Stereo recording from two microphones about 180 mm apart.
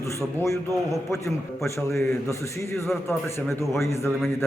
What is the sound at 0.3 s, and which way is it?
A man's voice, 15° left (ahead or behind).